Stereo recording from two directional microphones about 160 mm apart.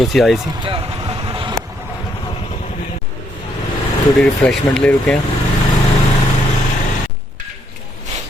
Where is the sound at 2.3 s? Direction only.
40° left (ahead or behind).